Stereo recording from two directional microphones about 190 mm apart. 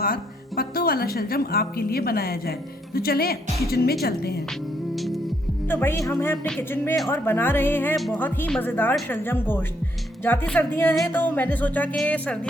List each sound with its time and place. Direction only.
0.0 s speech: 50° left (ahead or behind)
5.6 s music: 10° left (ahead or behind)
7.9 s speech: centre (ahead or behind)
8.2 s music: 10° left (ahead or behind)